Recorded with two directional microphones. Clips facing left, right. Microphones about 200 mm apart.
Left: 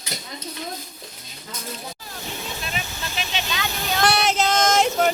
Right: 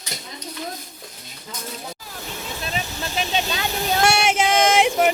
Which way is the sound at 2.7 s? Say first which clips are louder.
Right 3 dB; 35° right (ahead or behind).